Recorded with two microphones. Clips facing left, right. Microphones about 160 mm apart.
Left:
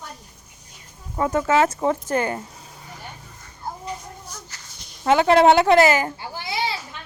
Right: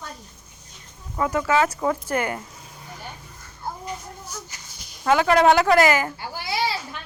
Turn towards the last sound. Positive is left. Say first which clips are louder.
# right 1 dB
turn(degrees=25)  # may be behind; listen again after turning